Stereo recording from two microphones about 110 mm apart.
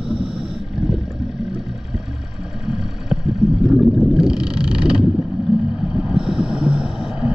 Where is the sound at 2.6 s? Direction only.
5° right (ahead or behind).